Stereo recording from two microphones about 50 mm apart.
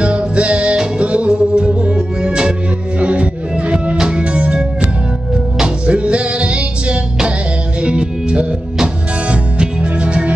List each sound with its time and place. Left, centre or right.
0.0 s music: right
5.9 s music: right